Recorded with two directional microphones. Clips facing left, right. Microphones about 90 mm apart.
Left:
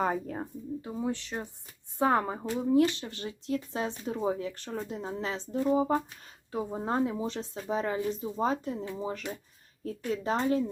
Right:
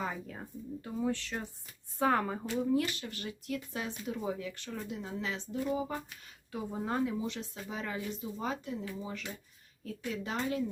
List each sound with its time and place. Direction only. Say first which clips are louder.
0.0 s speech: left 8 dB; 45° left (ahead or behind)
0.8 s speech: even; 20° left (ahead or behind); by 10.6 s 35° left (ahead or behind)